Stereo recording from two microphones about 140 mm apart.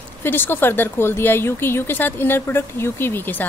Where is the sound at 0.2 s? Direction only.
15° left (ahead or behind).